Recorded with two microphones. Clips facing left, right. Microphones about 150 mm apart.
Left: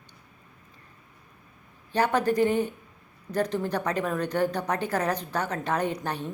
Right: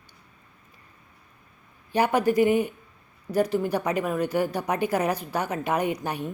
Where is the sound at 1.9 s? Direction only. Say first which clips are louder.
Right 2 dB; 10° right (ahead or behind).